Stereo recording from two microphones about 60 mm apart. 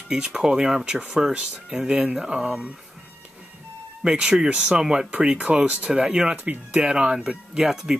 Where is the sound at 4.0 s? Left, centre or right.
Centre.